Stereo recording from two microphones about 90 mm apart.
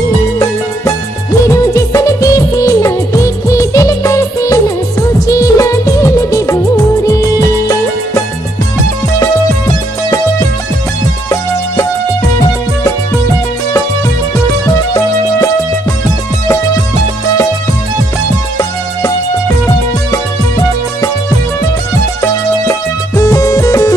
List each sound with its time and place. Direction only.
1.4 s music of bollywood: 35° left (ahead or behind)
7.2 s music: 40° left (ahead or behind)
11.2 s music: 35° left (ahead or behind)
20.1 s music: 40° left (ahead or behind)
22.2 s music: 35° left (ahead or behind)